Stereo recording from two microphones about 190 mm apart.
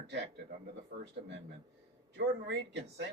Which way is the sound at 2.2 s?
65° right (ahead or behind).